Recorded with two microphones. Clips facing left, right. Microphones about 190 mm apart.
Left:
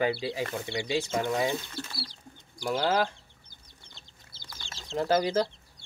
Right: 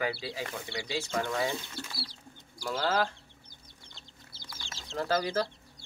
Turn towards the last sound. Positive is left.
turn(degrees=20)  # may be behind; listen again after turning